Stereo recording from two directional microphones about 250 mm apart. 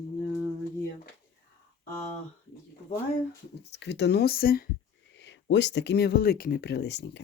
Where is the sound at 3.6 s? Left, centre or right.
Left.